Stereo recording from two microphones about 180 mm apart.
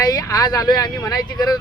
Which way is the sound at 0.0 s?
20° left (ahead or behind).